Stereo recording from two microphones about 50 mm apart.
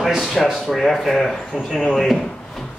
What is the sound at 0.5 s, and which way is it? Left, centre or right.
Speech, centre.